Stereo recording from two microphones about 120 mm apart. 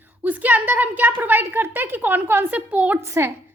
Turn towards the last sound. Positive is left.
turn(degrees=-25)  # may be behind; listen again after turning